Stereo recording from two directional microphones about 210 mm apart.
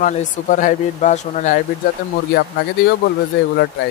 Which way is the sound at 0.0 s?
40° left (ahead or behind).